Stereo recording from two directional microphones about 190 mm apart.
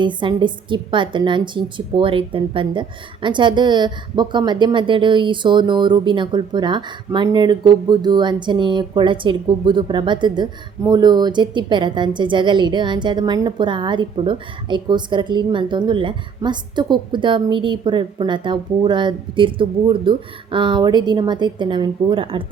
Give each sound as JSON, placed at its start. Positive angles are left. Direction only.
{"t": 0.0, "sound": "a woman's voice", "side_deg": -25}